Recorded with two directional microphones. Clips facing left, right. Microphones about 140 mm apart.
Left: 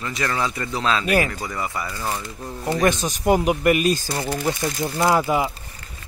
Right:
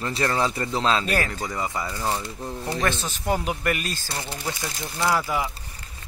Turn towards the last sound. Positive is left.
turn(degrees=25)  # may be behind; listen again after turning